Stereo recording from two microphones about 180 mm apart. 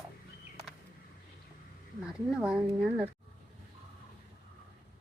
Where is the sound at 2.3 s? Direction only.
5° right (ahead or behind).